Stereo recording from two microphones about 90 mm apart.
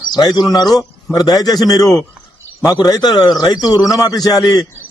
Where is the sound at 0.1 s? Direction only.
50° left (ahead or behind).